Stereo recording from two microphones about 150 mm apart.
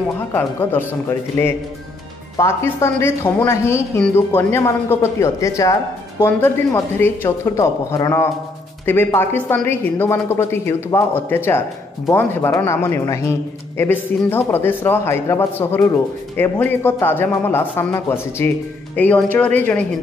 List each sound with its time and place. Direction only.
0.3 s speech: 15° left (ahead or behind)